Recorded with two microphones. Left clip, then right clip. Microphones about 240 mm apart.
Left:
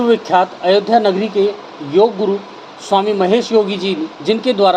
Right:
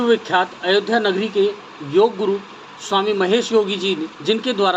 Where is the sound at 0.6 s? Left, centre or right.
Centre.